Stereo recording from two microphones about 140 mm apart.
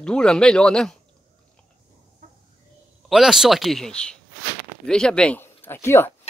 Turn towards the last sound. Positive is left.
turn(degrees=15)  # may be behind; listen again after turning